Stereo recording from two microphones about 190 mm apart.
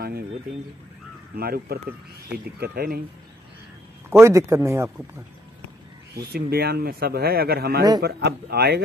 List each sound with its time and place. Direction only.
1.3 s speech: 55° right (ahead or behind)
4.1 s speech: 15° right (ahead or behind)
6.1 s speech: 55° right (ahead or behind)